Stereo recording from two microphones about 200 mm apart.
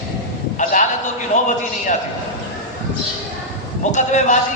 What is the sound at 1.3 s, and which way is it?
Speech, 35° left (ahead or behind).